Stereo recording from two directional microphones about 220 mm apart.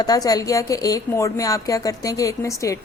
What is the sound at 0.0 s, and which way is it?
A woman's voice, 15° left (ahead or behind).